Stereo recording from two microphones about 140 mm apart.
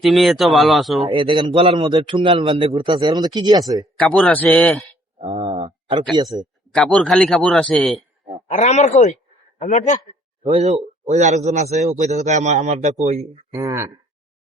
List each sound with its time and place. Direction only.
0.0 s a man's voice: centre (ahead or behind)
1.1 s a man's voice: 35° right (ahead or behind)
3.9 s a man's voice: 5° left (ahead or behind)
5.2 s a sound: 30° right (ahead or behind)
6.2 s a man's voice: centre (ahead or behind)
8.4 s a man's voice: 55° left (ahead or behind)
10.4 s a man's voice: 50° right (ahead or behind)
13.5 s speech: 20° right (ahead or behind)